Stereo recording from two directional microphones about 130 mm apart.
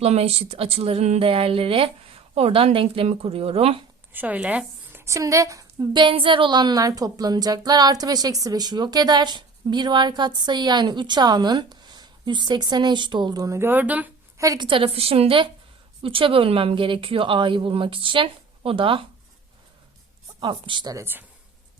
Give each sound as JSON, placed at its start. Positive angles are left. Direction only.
{"t": 0.0, "sound": "speech", "side_deg": -55}
{"t": 4.1, "sound": "a woman's voice", "side_deg": -15}
{"t": 14.3, "sound": "a woman's voice", "side_deg": -25}
{"t": 14.7, "sound": "speech", "side_deg": -45}
{"t": 20.4, "sound": "a woman's voice", "side_deg": -35}
{"t": 20.9, "sound": "speech", "side_deg": -15}